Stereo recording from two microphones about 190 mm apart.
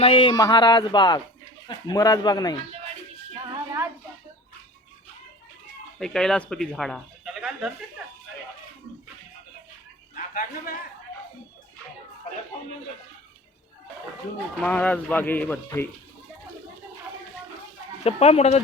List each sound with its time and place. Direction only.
0.0 s speech: 25° left (ahead or behind)
6.0 s speech: 5° left (ahead or behind)
10.2 s a sound: 45° left (ahead or behind)
14.6 s speech: 5° left (ahead or behind)
18.0 s speech: 35° left (ahead or behind)